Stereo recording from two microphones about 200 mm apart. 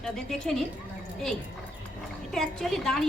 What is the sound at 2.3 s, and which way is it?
Speech, centre (ahead or behind).